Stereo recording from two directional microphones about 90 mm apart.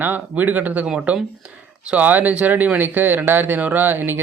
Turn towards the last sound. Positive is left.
turn(degrees=-25)  # may be behind; listen again after turning